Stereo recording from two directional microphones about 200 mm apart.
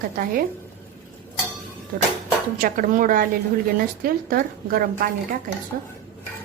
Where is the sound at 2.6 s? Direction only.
45° right (ahead or behind).